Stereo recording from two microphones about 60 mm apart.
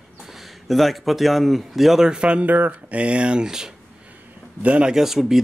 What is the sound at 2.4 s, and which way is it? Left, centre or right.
Speech, right.